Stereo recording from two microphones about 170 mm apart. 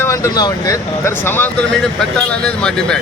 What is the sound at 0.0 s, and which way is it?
Speech, 20° left (ahead or behind).